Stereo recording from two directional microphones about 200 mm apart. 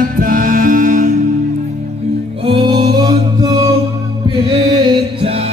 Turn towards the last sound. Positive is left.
turn(degrees=-30)  # may be behind; listen again after turning